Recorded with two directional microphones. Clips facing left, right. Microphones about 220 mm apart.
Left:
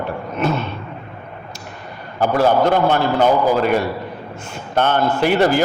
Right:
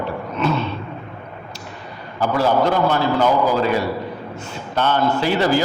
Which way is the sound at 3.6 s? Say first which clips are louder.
Left 2 dB; 55° left (ahead or behind).